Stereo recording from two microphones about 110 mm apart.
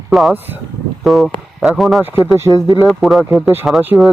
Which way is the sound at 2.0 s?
20° right (ahead or behind).